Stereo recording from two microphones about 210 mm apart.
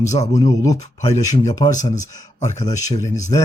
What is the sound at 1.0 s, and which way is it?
Speech, 30° left (ahead or behind).